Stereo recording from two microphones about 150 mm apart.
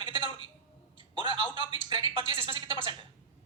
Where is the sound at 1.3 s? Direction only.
30° right (ahead or behind).